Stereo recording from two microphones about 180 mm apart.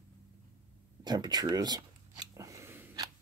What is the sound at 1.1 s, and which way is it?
Shuffling cards, 25° right (ahead or behind).